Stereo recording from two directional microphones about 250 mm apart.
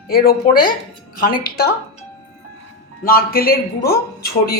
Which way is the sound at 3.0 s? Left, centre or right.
Left.